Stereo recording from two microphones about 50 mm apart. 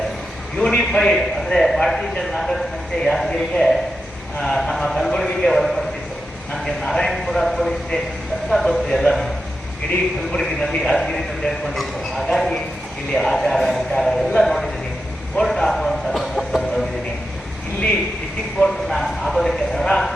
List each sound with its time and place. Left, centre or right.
0.5 s a man's voice: centre
0.8 s a man's voice: centre
10.3 s a man's voice: centre
15.4 s a sound: centre
18.6 s speech: centre